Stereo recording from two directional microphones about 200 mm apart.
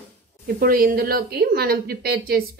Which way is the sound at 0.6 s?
45° right (ahead or behind).